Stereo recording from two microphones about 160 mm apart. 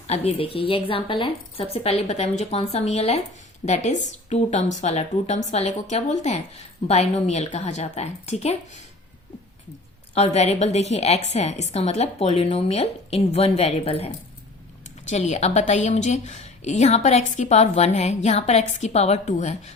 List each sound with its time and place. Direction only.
0.1 s a woman's voice: 40° left (ahead or behind)
10.2 s a woman's voice: 40° left (ahead or behind)